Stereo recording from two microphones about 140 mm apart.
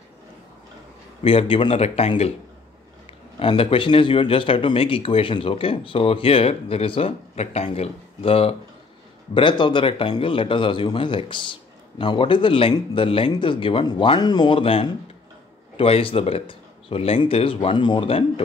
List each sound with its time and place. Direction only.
1.2 s speech: 40° left (ahead or behind)
3.3 s speech: 40° left (ahead or behind)